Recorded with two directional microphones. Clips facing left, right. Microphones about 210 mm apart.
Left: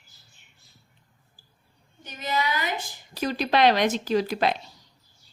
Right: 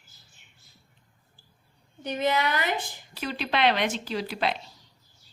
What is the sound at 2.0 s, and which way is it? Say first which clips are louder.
Speech: right 3 dB; 65° right (ahead or behind).